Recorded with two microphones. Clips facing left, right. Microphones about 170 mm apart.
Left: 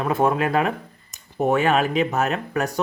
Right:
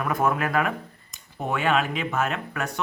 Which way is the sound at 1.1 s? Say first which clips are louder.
Left 9 dB; 45° left (ahead or behind).